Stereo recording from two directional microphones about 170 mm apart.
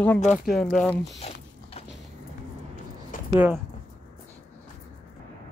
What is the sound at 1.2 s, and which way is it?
Speech, 40° left (ahead or behind).